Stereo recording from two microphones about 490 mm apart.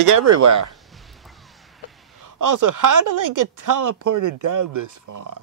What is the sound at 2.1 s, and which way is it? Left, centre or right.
A woman's voice, right.